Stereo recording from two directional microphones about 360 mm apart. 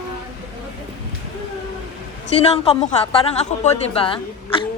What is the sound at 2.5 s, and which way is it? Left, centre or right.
A woman's voice, centre.